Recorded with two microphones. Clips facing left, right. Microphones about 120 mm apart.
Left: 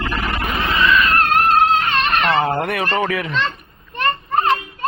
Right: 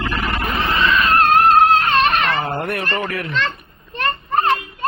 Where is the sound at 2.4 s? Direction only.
90° left.